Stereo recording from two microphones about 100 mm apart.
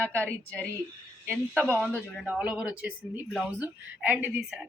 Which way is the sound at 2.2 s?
10° right (ahead or behind).